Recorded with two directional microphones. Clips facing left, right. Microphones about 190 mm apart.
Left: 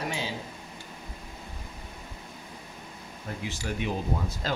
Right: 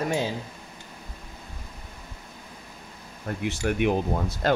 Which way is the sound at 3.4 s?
60° right (ahead or behind).